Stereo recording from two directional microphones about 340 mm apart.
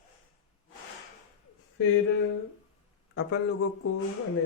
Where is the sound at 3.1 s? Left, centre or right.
Left.